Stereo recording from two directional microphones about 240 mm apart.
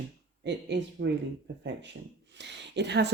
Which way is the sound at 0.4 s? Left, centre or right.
Right.